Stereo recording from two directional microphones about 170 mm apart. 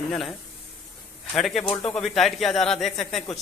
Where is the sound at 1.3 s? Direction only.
Centre (ahead or behind).